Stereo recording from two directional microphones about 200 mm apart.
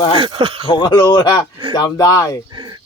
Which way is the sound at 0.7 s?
20° left (ahead or behind).